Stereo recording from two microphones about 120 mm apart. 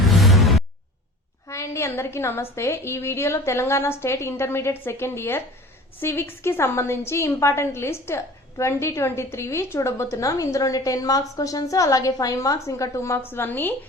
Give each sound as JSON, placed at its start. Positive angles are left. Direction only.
{"t": 0.0, "sound": "music", "side_deg": 0}
{"t": 1.5, "sound": "a woman's voice", "side_deg": 25}